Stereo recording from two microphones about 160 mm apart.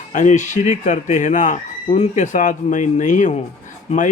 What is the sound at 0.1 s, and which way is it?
Speech, 50° left (ahead or behind).